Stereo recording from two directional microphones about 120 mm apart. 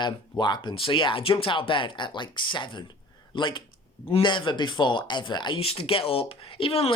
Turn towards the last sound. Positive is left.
turn(degrees=55)  # may be behind; listen again after turning